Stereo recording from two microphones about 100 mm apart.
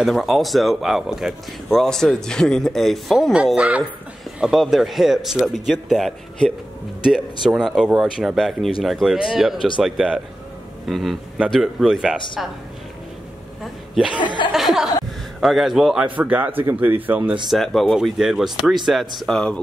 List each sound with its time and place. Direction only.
0.0 s speech: centre (ahead or behind)
3.5 s speech: 10° right (ahead or behind)
13.9 s speech: 10° right (ahead or behind)
14.2 s speech: 50° left (ahead or behind)
14.5 s speech: 5° right (ahead or behind)
17.5 s speech: centre (ahead or behind)